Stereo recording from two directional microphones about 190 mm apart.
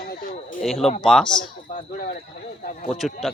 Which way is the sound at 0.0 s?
50° left (ahead or behind).